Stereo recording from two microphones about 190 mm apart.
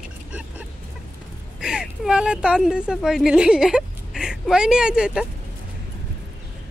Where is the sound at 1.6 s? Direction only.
5° right (ahead or behind).